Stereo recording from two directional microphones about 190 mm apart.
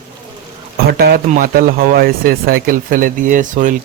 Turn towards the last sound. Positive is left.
turn(degrees=-45)  # may be behind; listen again after turning